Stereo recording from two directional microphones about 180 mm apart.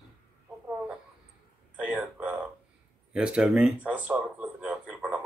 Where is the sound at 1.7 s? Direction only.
5° right (ahead or behind).